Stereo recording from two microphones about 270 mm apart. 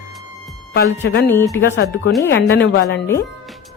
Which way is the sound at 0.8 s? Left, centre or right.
Left.